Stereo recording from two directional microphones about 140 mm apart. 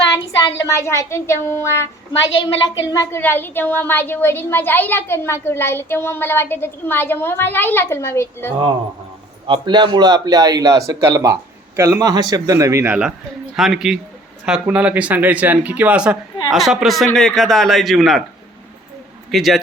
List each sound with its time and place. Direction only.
0.5 s speech: 20° left (ahead or behind)
2.2 s a woman's voice: 35° left (ahead or behind)
2.9 s a woman's voice: 20° left (ahead or behind)
9.5 s speech: 35° right (ahead or behind)
12.9 s a man's voice: 5° right (ahead or behind)
19.3 s a man's voice: centre (ahead or behind)